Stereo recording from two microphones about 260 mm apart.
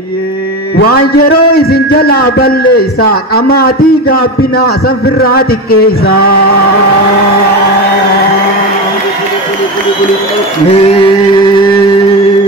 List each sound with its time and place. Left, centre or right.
0.7 s a man's voice: left
10.7 s music: left